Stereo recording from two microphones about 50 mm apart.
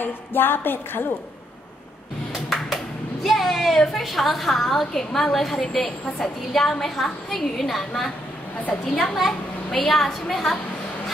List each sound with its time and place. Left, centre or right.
0.0 s music: left
2.3 s a sound: centre
4.0 s a woman's voice: centre
5.8 s a woman's voice: centre
9.1 s a woman's voice: centre